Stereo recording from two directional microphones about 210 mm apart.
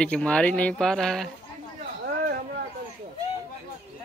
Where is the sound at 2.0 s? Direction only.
50° right (ahead or behind).